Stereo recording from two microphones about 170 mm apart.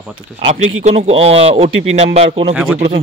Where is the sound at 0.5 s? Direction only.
40° right (ahead or behind).